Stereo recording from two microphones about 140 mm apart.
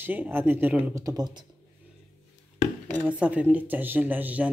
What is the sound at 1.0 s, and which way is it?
Speech, 30° right (ahead or behind).